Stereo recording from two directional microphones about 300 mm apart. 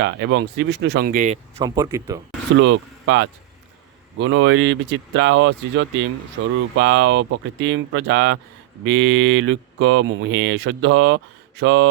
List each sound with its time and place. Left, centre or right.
0.0 s speech: right; by 2.2 s centre
2.6 s speech: right